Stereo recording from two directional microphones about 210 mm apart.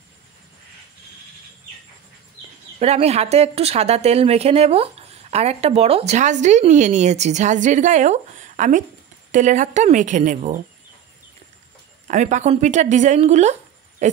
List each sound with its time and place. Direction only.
2.8 s speech: 30° right (ahead or behind)
12.1 s speech: 35° right (ahead or behind)